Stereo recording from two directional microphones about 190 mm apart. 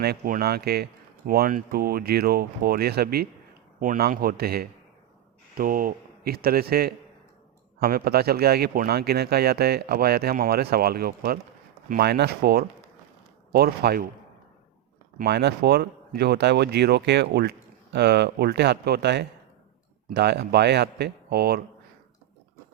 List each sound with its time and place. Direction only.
0.0 s speech: 55° right (ahead or behind)
15.2 s speech: 60° right (ahead or behind)